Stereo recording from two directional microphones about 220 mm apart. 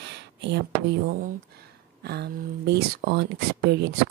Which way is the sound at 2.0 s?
45° right (ahead or behind).